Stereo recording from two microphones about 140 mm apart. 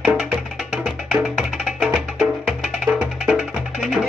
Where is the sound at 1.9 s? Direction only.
5° right (ahead or behind).